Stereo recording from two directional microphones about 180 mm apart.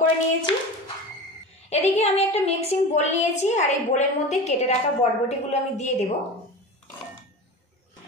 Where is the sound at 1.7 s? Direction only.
35° left (ahead or behind).